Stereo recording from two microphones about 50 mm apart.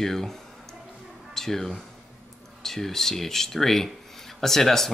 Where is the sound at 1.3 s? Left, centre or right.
Centre.